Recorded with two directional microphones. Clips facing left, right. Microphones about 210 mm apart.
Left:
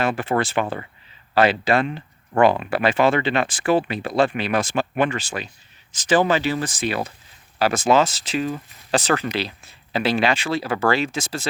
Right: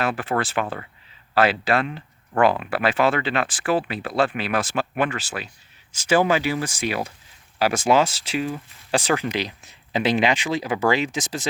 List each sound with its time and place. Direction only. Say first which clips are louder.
0.0 s speech: left 2 dB; centre (ahead or behind); by 11.4 s 15° right (ahead or behind)